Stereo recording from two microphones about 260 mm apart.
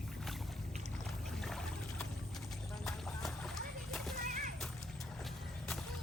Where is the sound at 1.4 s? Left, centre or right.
Centre.